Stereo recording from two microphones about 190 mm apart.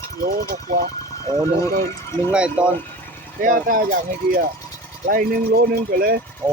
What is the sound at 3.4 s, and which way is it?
Speech, 45° right (ahead or behind).